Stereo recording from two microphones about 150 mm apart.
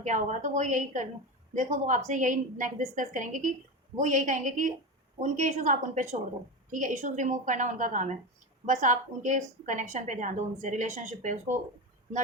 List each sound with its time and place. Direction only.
0.0 s a woman's voice: 55° right (ahead or behind)